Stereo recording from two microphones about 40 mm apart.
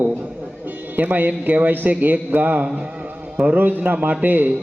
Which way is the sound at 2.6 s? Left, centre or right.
Centre.